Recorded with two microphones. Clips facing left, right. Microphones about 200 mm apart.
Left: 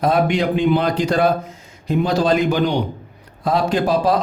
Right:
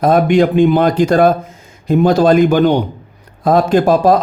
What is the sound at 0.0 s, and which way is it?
A man's voice, 50° right (ahead or behind).